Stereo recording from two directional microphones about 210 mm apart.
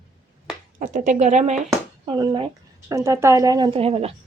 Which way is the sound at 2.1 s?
20° right (ahead or behind).